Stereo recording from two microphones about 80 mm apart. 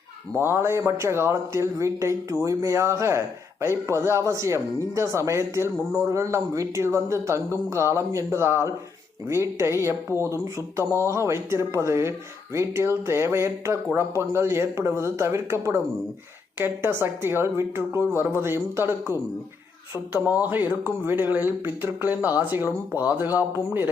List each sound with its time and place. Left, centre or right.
0.3 s speech: right
20.1 s speech: centre